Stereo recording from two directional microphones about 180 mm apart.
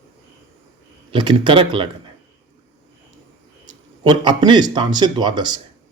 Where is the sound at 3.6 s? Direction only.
25° right (ahead or behind).